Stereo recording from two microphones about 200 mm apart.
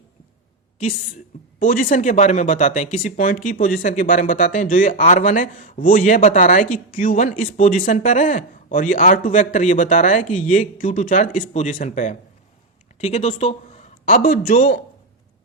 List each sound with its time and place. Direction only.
1.5 s a man's voice: 45° left (ahead or behind)